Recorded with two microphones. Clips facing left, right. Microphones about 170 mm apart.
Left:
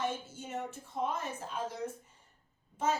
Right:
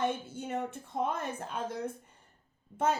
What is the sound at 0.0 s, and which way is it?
A woman's voice, 60° right (ahead or behind).